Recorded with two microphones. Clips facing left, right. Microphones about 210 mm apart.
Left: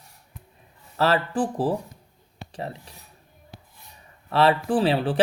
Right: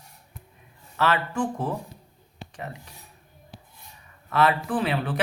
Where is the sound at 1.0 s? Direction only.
35° left (ahead or behind).